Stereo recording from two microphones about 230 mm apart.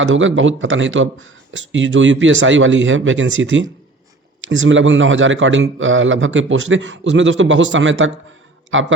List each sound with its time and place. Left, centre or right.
0.0 s a man's voice: right